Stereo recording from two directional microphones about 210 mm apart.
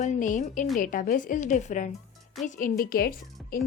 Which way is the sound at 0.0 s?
35° left (ahead or behind).